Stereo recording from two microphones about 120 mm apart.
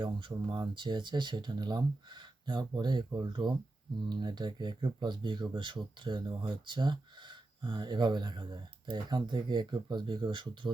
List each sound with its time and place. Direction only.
0.0 s speech: 40° right (ahead or behind)